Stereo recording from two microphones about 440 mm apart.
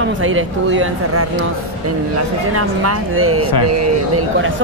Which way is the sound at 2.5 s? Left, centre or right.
Right.